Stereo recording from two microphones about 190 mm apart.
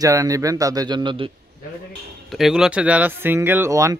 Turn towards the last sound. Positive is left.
turn(degrees=-15)  # may be behind; listen again after turning